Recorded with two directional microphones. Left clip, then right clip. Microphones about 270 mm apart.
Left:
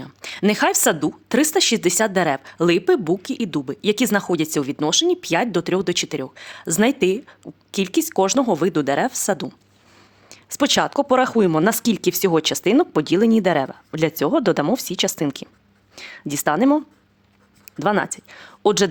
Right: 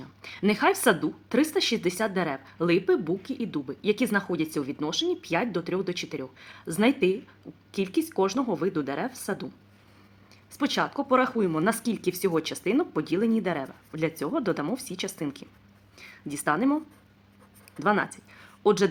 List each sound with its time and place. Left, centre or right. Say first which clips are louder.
0.0 s a woman's voice: left 7 dB; left